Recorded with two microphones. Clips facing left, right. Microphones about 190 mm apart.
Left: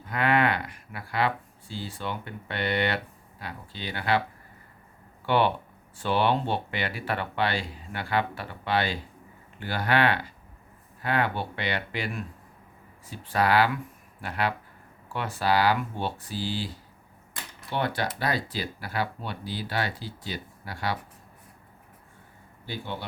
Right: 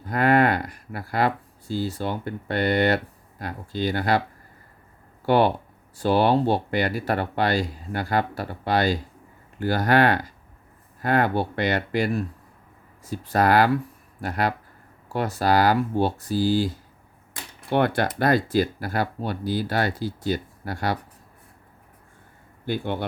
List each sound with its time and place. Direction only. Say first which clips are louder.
0.0 s speech: right 5 dB; 40° right (ahead or behind)
5.2 s speech: right 5 dB; 40° right (ahead or behind)
22.6 s a man's voice: right 9 dB; 55° right (ahead or behind)